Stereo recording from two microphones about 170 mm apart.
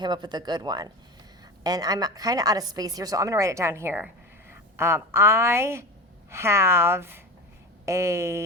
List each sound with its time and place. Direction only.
0.0 s a woman's voice: 25° right (ahead or behind)